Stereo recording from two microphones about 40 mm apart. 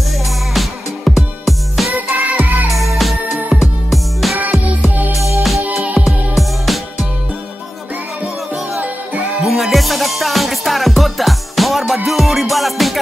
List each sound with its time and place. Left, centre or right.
0.6 s music: centre
2.0 s music: right
2.7 s music: centre
4.4 s music: right
5.1 s music: centre
5.6 s music: right
6.0 s music: centre
9.5 s music: centre